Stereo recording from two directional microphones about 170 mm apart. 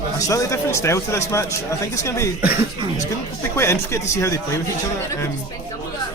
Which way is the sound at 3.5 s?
15° left (ahead or behind).